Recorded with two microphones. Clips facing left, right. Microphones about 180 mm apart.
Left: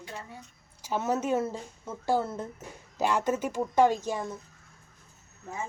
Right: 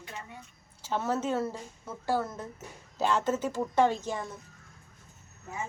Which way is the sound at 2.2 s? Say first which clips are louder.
Left 3 dB; 30° left (ahead or behind).